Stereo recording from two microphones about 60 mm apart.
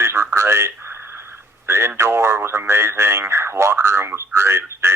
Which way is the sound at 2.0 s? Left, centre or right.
Right.